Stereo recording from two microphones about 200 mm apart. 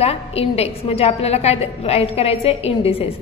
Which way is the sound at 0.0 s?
30° left (ahead or behind).